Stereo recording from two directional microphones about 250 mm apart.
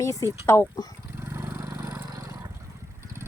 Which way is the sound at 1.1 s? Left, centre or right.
Centre.